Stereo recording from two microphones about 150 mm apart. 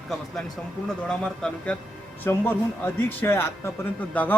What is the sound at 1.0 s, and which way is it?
Speech, 5° left (ahead or behind).